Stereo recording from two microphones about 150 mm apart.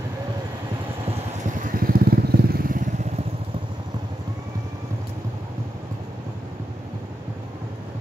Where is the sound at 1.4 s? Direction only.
65° right (ahead or behind).